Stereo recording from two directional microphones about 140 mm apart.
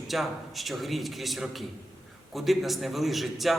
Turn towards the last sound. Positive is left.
turn(degrees=0)  # may be behind; listen again after turning